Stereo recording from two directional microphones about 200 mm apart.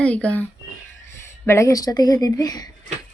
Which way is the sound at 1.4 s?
15° left (ahead or behind).